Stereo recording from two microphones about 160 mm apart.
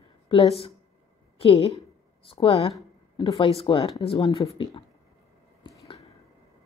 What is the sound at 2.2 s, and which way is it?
Speech, 35° left (ahead or behind).